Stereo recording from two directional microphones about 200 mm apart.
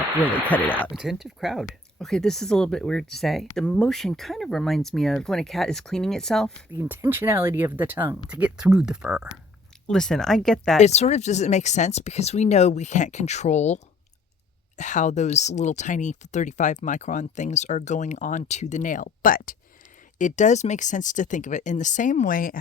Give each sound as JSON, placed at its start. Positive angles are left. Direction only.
{"t": 0.2, "sound": "speech", "side_deg": 10}
{"t": 6.7, "sound": "speech", "side_deg": -10}
{"t": 10.8, "sound": "speech", "side_deg": 35}